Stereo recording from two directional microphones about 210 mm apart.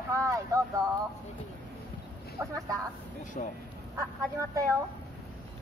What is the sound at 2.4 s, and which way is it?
Speech, 15° right (ahead or behind).